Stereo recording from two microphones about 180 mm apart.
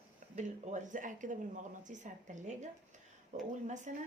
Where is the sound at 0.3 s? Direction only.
40° right (ahead or behind).